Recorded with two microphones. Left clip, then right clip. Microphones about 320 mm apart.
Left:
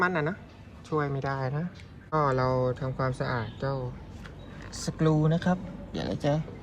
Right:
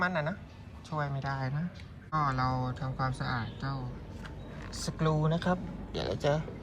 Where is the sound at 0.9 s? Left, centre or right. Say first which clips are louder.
Left 6 dB; left.